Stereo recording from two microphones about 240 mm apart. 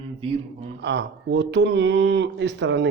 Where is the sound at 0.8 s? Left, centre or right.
Right.